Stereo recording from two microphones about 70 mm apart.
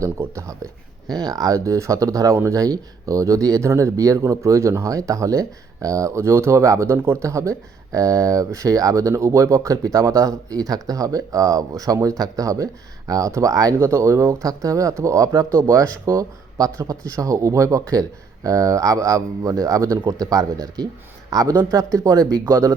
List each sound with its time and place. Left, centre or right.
0.0 s speech: right
1.1 s speech: right
13.7 s speech: right